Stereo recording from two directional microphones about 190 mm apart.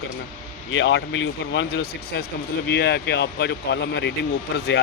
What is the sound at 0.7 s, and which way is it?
Speech, 75° left (ahead or behind).